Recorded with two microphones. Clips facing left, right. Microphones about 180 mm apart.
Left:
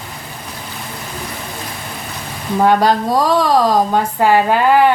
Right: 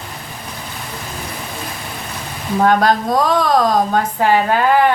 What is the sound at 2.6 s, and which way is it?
A woman's voice, 5° left (ahead or behind).